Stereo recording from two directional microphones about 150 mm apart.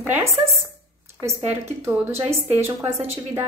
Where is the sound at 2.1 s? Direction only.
45° right (ahead or behind).